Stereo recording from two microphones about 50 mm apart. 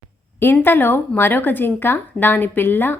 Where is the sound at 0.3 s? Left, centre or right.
Left.